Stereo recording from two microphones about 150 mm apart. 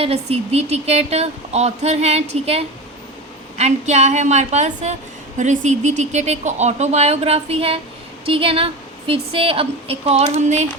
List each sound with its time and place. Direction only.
0.0 s a woman's voice: 40° right (ahead or behind)